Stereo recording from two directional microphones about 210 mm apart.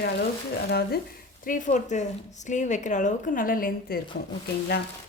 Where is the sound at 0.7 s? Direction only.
50° left (ahead or behind).